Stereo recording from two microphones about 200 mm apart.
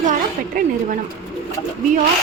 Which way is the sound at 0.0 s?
40° right (ahead or behind).